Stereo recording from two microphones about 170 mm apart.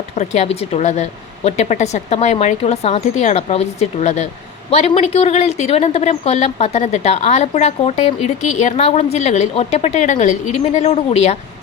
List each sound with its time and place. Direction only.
0.2 s a woman's voice: 40° left (ahead or behind)